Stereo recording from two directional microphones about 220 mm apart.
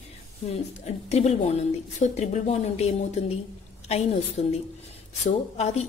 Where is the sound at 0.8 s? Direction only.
30° left (ahead or behind).